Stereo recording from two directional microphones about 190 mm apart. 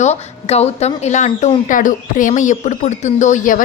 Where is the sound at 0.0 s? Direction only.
35° left (ahead or behind).